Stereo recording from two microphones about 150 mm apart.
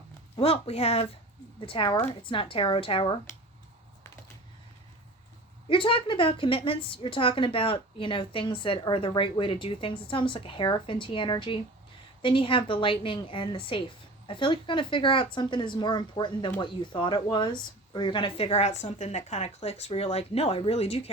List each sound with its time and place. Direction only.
0.3 s a woman's voice: 40° left (ahead or behind)
5.6 s a woman's voice: 35° left (ahead or behind)